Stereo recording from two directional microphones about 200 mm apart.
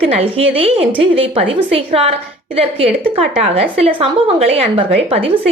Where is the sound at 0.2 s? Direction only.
30° right (ahead or behind).